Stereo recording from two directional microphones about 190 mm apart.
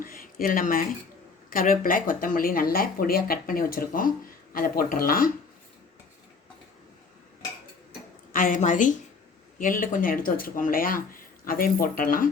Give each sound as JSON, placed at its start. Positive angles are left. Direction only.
{"t": 0.0, "sound": "speech", "side_deg": 50}
{"t": 8.3, "sound": "a woman's voice", "side_deg": 45}